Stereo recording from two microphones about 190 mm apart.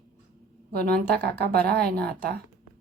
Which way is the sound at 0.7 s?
55° right (ahead or behind).